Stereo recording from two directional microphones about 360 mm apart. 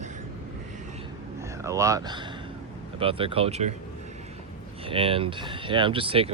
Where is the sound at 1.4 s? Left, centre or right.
Centre.